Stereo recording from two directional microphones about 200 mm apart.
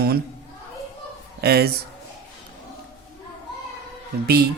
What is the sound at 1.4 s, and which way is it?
Speech, 50° right (ahead or behind).